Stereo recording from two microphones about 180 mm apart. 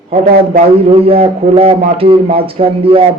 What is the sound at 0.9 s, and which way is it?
Speech, 30° right (ahead or behind).